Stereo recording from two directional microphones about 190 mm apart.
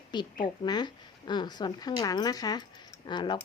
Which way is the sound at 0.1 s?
25° left (ahead or behind).